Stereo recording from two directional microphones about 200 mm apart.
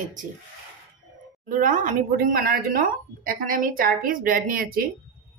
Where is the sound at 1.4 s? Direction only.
40° right (ahead or behind).